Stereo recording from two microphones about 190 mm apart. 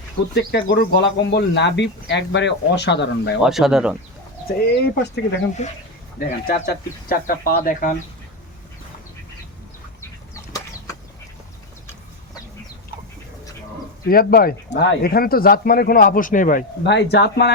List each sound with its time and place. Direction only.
0.3 s speech: 65° left (ahead or behind)
3.4 s speech: centre (ahead or behind)
4.8 s speech: 60° left (ahead or behind)
5.6 s speech: 35° left (ahead or behind)
6.1 s speech: 50° left (ahead or behind)
10.0 s a sound: 15° left (ahead or behind)
14.1 s speech: 50° left (ahead or behind)
16.8 s speech: 65° left (ahead or behind)